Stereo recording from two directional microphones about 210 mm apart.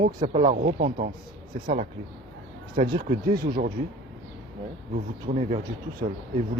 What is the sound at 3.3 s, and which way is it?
Speech, 45° right (ahead or behind).